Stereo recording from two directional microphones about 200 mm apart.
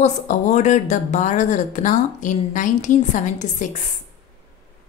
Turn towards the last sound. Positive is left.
turn(degrees=35)  # may be behind; listen again after turning